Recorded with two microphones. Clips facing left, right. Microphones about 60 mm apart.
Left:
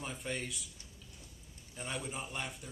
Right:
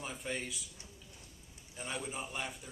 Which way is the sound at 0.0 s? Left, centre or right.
Centre.